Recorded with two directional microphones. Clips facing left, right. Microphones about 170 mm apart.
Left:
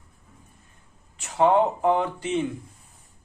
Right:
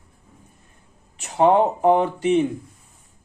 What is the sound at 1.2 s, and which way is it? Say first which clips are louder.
Speech: right 3 dB; 20° right (ahead or behind).